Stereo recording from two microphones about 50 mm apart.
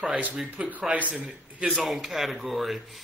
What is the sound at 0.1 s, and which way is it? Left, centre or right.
Speech, right.